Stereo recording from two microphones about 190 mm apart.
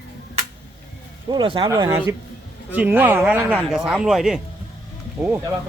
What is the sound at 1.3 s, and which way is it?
Speech, 25° right (ahead or behind).